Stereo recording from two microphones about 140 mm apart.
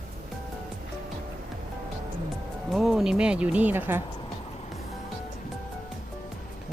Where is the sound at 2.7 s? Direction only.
Centre (ahead or behind).